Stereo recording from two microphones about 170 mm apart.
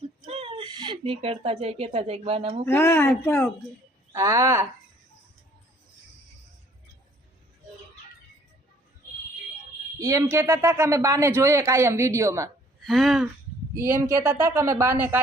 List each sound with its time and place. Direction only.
0.3 s speech: 35° right (ahead or behind)
2.6 s speech: 15° left (ahead or behind)
4.1 s speech: 20° right (ahead or behind)
10.0 s speech: 20° right (ahead or behind)
12.8 s throat clearing: centre (ahead or behind)
13.7 s speech: 15° right (ahead or behind)